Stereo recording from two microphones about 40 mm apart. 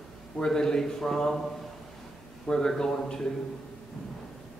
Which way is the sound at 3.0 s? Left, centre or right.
Centre.